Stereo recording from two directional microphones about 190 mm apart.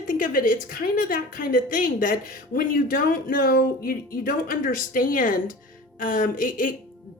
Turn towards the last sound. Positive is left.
turn(degrees=45)  # may be behind; listen again after turning